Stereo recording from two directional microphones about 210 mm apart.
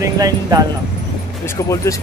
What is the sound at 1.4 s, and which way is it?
Speech, 15° left (ahead or behind).